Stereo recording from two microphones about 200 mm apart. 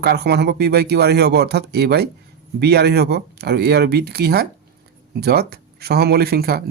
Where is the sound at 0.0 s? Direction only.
55° right (ahead or behind).